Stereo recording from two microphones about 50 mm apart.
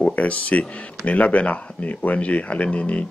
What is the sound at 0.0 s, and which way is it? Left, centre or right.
Speech, left.